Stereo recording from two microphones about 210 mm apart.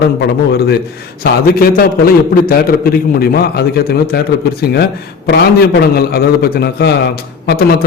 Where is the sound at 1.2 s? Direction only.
45° left (ahead or behind).